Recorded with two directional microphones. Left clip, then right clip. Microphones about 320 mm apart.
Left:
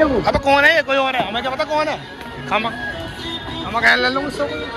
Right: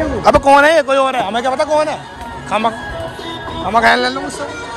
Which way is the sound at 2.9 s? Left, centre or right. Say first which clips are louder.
Right 3 dB; right.